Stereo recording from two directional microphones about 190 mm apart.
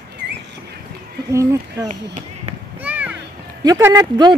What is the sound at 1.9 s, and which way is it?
Basketball bounce, 35° right (ahead or behind).